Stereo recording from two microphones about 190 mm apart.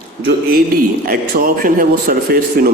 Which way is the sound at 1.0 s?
50° right (ahead or behind).